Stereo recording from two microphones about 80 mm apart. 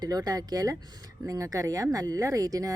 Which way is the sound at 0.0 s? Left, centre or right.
Right.